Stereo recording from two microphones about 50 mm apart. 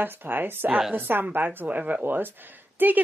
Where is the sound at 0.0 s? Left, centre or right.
Right.